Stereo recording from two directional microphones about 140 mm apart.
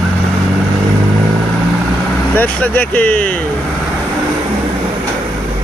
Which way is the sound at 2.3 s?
10° left (ahead or behind).